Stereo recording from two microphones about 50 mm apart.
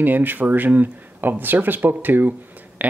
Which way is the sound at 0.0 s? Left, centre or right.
Right.